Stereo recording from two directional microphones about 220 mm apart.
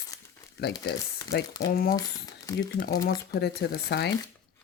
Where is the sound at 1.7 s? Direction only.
40° left (ahead or behind).